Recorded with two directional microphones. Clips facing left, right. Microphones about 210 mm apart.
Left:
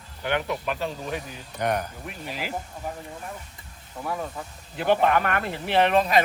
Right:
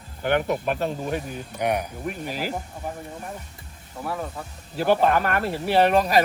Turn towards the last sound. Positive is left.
turn(degrees=-35)  # may be behind; listen again after turning